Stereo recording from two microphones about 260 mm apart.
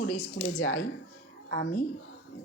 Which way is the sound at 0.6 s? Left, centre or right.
Left.